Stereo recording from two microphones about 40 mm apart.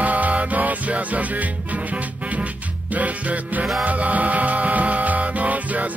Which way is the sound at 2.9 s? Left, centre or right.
Right.